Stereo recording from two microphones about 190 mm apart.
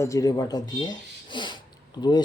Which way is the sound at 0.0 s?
15° left (ahead or behind).